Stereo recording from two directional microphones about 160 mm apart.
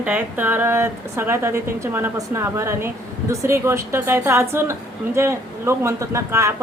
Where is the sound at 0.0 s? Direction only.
10° right (ahead or behind).